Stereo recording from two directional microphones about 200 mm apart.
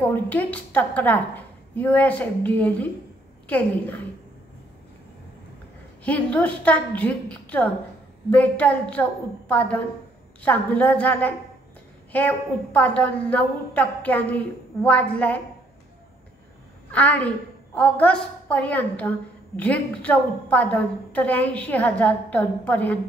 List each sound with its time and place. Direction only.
0.0 s a woman's voice: 10° left (ahead or behind)
6.0 s a woman's voice: 5° left (ahead or behind)
16.9 s a woman's voice: 10° left (ahead or behind)